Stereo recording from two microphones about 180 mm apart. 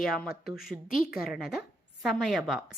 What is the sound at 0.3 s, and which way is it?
Speech, 60° left (ahead or behind).